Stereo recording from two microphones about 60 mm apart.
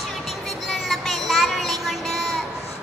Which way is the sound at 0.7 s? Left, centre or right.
Centre.